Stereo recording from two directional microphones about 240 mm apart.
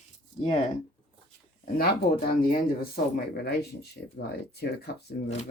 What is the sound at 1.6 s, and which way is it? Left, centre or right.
Speech, left.